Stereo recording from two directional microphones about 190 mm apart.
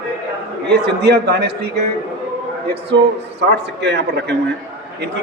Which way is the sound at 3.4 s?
65° right (ahead or behind).